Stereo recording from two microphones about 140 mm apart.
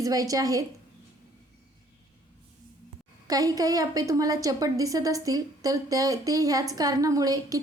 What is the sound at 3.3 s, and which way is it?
A woman's voice, 25° right (ahead or behind).